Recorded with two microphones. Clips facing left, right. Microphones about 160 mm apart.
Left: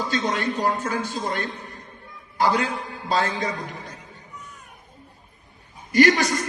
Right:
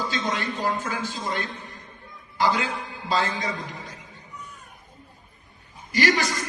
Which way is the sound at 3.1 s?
55° left (ahead or behind).